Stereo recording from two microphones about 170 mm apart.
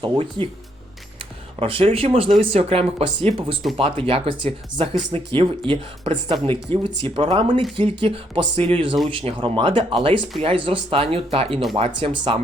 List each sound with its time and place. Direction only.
0.0 s speech: 30° right (ahead or behind)
1.5 s speech: 30° right (ahead or behind)